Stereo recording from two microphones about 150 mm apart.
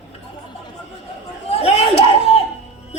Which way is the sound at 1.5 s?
45° left (ahead or behind).